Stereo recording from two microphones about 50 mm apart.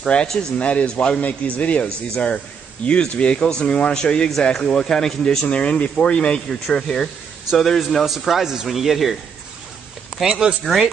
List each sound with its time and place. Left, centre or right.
0.0 s speech: centre
8.0 s a man's voice: centre
10.2 s speech: centre
10.6 s a man's voice: centre